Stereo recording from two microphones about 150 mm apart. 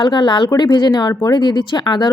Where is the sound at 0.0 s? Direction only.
30° left (ahead or behind).